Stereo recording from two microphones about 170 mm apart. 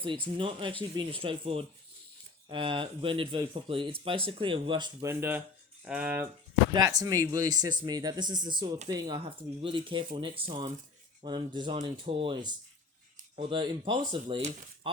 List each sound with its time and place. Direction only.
0.0 s speech: 30° right (ahead or behind)
5.8 s speech: 5° right (ahead or behind)
6.7 s speech: 20° right (ahead or behind)